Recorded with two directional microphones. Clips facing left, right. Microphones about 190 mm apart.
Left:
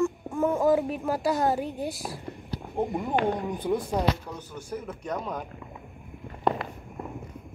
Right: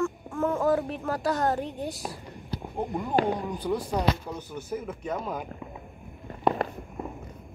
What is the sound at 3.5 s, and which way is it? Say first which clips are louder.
Speech: left 2 dB; 20° left (ahead or behind).